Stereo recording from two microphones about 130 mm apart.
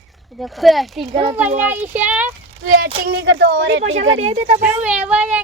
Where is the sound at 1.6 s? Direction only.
15° right (ahead or behind).